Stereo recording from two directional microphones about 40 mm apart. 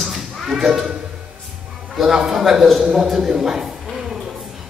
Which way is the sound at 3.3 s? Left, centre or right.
Centre.